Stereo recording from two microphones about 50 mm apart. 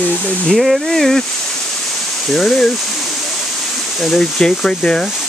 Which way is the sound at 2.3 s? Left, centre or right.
Centre.